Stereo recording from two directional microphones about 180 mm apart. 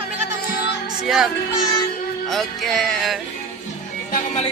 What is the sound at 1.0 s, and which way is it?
Speech, centre (ahead or behind).